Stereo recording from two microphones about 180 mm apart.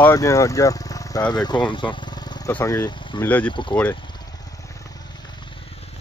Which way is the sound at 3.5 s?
25° left (ahead or behind).